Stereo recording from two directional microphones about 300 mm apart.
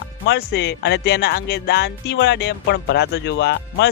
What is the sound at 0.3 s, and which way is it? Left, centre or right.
Speech, left.